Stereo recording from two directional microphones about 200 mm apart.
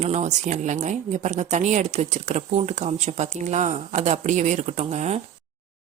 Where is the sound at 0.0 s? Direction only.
35° right (ahead or behind).